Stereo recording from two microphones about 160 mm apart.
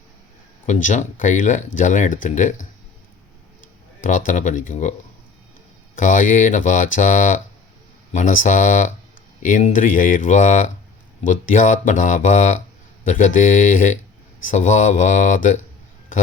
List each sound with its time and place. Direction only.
0.7 s speech: 50° left (ahead or behind)
4.0 s speech: 55° left (ahead or behind)
6.0 s speech: 55° left (ahead or behind)